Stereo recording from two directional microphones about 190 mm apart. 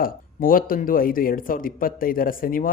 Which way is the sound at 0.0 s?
45° left (ahead or behind).